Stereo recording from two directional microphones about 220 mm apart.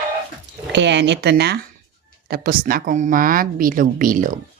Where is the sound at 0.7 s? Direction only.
55° right (ahead or behind); by 4.4 s 40° right (ahead or behind).